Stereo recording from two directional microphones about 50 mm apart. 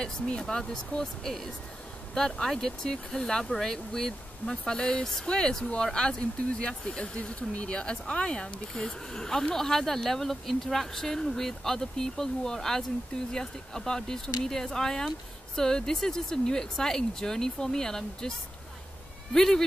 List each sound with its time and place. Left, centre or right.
0.0 s speech: centre
19.3 s speech: centre